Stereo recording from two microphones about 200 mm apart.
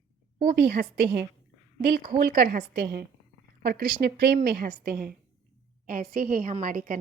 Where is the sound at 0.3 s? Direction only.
50° right (ahead or behind).